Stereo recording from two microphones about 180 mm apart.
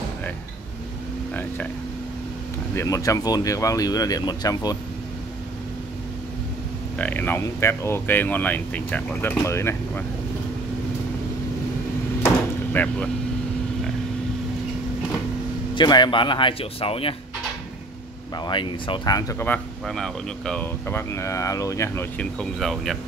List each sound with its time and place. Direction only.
2.7 s speech: 15° left (ahead or behind)
7.0 s speech: 10° left (ahead or behind)
12.7 s speech: 10° left (ahead or behind)
15.7 s speech: 25° left (ahead or behind)
18.4 s speech: 25° left (ahead or behind); by 22.9 s centre (ahead or behind)